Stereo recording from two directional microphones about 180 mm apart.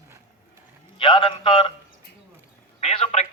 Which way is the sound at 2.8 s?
35° left (ahead or behind).